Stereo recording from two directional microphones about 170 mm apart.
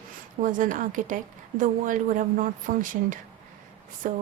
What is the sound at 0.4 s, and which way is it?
A woman's voice, 50° right (ahead or behind).